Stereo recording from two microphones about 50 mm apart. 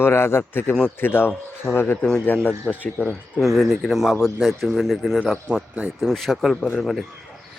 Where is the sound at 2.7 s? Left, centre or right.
Centre.